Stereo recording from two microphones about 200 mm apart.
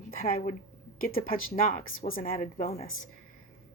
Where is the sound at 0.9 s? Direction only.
45° left (ahead or behind).